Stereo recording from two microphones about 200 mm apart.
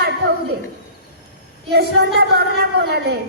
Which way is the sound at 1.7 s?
55° right (ahead or behind).